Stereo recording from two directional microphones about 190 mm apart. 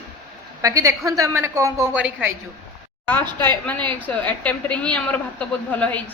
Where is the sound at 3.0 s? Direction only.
10° left (ahead or behind).